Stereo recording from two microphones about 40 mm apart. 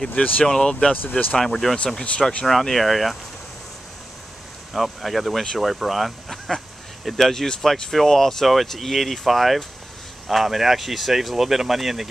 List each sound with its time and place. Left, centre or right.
0.1 s speech: left
0.5 s speech: centre
2.4 s speech: centre
4.7 s speech: centre